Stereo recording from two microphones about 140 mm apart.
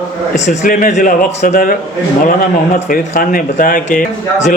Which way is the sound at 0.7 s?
75° left (ahead or behind).